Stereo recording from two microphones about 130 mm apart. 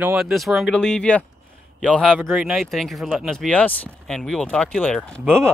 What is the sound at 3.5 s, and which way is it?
Speech, 10° left (ahead or behind).